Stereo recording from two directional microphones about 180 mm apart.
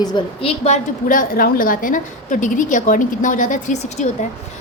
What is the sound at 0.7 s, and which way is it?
A woman's voice, 50° left (ahead or behind).